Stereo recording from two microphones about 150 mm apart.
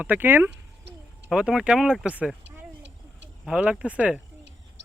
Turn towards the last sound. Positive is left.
turn(degrees=-10)  # may be behind; listen again after turning